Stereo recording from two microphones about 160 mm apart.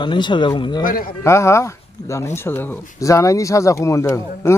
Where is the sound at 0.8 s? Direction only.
65° left (ahead or behind).